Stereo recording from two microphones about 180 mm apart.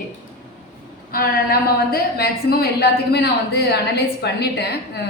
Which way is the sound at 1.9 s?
60° left (ahead or behind).